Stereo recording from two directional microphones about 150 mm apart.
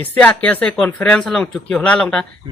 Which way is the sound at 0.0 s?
10° left (ahead or behind).